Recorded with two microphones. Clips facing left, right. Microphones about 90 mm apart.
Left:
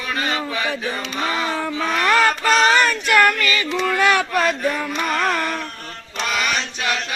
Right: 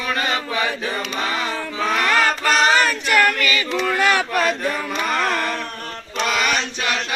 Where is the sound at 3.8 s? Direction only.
Centre (ahead or behind).